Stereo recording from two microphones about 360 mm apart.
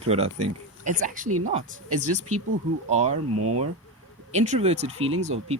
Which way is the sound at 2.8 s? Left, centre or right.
Centre.